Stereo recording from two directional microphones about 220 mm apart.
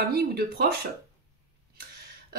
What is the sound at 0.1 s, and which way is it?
Speech, 45° right (ahead or behind).